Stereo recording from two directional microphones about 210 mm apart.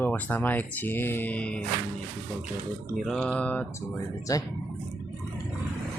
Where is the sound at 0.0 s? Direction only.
10° left (ahead or behind).